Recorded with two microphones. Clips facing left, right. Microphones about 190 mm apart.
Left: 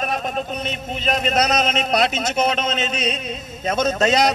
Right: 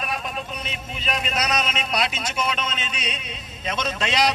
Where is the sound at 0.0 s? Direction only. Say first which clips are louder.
Left 6 dB; 40° left (ahead or behind).